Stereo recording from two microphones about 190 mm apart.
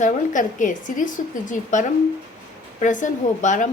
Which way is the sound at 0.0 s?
40° left (ahead or behind).